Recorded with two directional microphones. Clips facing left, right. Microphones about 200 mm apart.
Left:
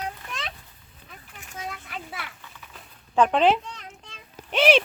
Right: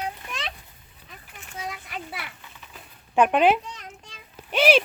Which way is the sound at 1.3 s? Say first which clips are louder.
Right 1 dB; 5° right (ahead or behind).